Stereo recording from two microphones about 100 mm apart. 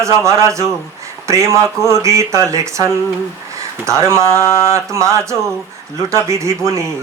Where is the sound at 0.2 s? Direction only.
30° right (ahead or behind).